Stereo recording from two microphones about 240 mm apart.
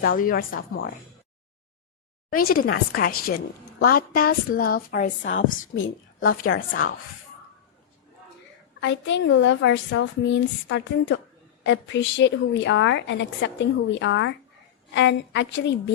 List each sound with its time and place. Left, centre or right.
0.0 s a woman's voice: left
2.3 s a woman's voice: left
5.7 s a woman's voice: left
8.8 s a woman's voice: left